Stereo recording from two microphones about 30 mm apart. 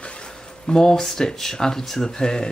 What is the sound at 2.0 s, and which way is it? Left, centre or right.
Speech, left.